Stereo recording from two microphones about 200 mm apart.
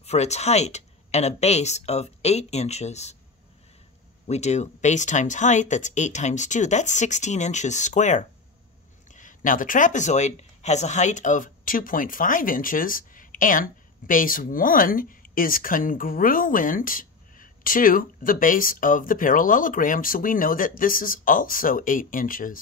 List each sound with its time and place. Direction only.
0.0 s speech: 35° left (ahead or behind)
4.3 s speech: 35° left (ahead or behind)